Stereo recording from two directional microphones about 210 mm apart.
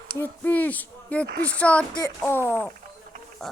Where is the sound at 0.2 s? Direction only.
10° left (ahead or behind).